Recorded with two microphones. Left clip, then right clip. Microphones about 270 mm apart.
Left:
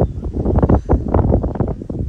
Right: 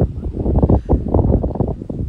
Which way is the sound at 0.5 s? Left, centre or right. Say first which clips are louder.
Left 1 dB; right.